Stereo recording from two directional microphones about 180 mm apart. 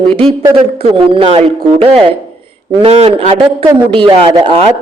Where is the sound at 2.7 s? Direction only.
30° right (ahead or behind).